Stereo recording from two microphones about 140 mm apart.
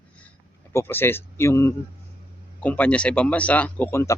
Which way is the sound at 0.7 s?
15° left (ahead or behind).